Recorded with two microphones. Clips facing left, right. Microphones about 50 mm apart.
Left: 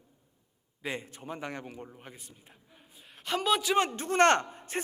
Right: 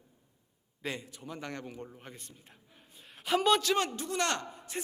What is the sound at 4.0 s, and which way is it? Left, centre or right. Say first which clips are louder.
Speech: left 9 dB; left.